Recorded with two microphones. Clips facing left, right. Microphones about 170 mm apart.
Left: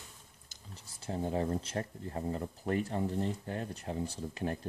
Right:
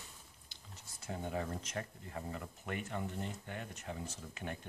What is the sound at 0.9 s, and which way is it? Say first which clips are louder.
Speech: left 6 dB; 30° left (ahead or behind).